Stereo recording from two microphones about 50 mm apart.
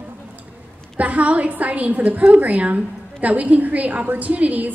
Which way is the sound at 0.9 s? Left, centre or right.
Right.